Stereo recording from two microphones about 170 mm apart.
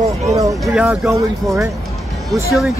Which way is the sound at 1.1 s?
20° right (ahead or behind).